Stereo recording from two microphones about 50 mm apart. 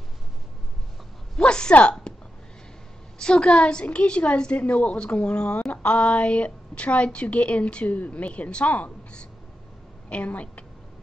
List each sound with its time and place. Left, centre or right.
1.4 s a woman's voice: centre
3.2 s a woman's voice: centre
5.7 s a woman's voice: left
10.0 s a woman's voice: left